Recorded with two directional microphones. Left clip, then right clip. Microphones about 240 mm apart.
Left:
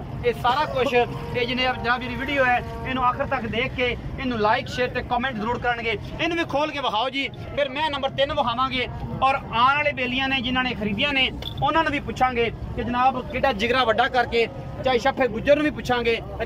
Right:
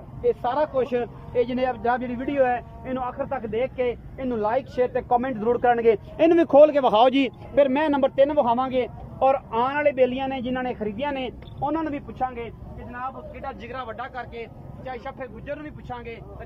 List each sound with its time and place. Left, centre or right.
0.2 s speech: right; by 12.4 s centre
13.4 s speech: left